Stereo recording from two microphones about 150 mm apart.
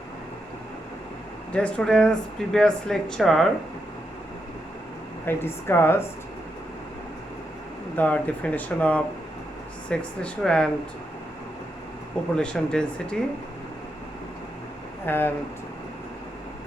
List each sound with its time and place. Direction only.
1.5 s speech: 5° left (ahead or behind)
5.2 s speech: 15° left (ahead or behind)
7.9 s speech: 10° left (ahead or behind)
12.4 s speech: 5° left (ahead or behind)
15.0 s speech: 15° left (ahead or behind)